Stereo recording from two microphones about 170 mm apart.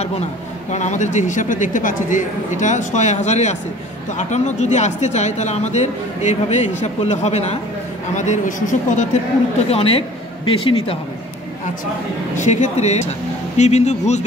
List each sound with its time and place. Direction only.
0.7 s speech: 45° left (ahead or behind)
9.7 s speech: 35° left (ahead or behind)
12.4 s speech: 45° left (ahead or behind)